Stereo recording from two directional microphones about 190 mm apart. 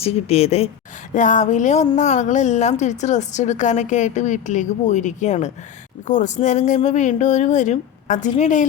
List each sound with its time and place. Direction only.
0.0 s a woman's voice: 30° left (ahead or behind)